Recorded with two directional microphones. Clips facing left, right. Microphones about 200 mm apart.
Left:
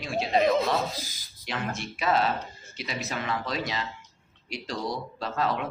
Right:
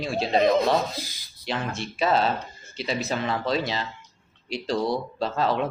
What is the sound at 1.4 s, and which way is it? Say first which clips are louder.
Speech: right 3 dB; 30° right (ahead or behind).